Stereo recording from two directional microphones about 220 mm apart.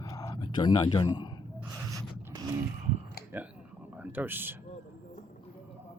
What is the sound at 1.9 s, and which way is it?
Zipper, 15° right (ahead or behind).